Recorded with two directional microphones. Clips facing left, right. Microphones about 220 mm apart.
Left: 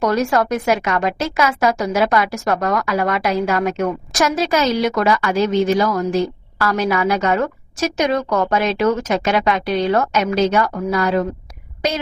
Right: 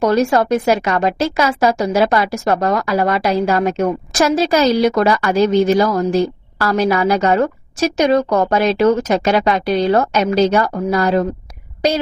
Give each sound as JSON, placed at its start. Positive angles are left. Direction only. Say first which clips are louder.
{"t": 0.0, "sound": "speech", "louder": "right 3 dB", "side_deg": -30}